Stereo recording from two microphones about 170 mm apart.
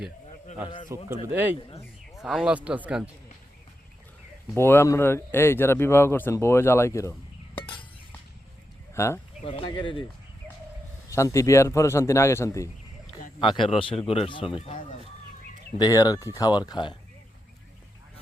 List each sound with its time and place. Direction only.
0.9 s speech: 15° right (ahead or behind)
4.5 s speech: 15° left (ahead or behind)
9.0 s speech: 15° left (ahead or behind)
9.4 s speech: 35° left (ahead or behind)
11.1 s speech: 15° left (ahead or behind)
13.4 s speech: 30° left (ahead or behind)
15.8 s speech: 20° left (ahead or behind)